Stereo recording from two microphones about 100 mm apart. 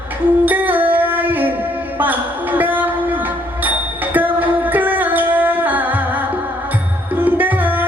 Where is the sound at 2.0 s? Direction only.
20° right (ahead or behind).